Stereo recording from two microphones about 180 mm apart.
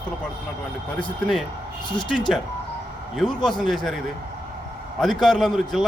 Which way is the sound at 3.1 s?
Centre (ahead or behind).